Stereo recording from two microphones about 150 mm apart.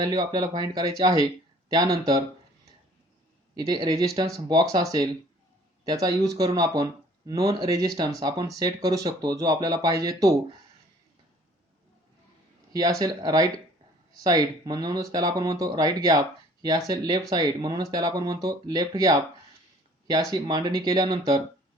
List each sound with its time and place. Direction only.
0.0 s speech: 25° right (ahead or behind)
3.5 s speech: 25° right (ahead or behind)
12.7 s speech: 25° right (ahead or behind)
20.3 s speech: 25° right (ahead or behind)